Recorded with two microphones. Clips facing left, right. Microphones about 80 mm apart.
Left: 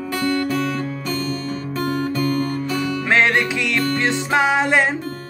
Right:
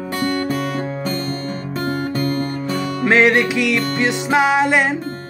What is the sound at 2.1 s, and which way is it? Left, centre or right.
Music, right.